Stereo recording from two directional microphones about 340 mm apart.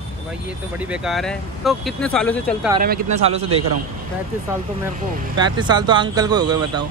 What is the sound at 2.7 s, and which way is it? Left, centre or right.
Speech, right.